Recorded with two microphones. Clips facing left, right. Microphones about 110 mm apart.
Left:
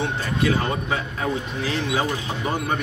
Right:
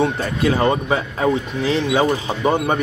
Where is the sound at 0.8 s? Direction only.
30° right (ahead or behind).